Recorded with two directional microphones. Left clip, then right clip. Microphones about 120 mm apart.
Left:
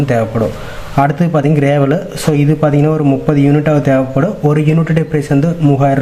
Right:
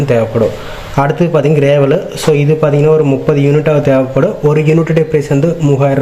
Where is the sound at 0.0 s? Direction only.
20° right (ahead or behind).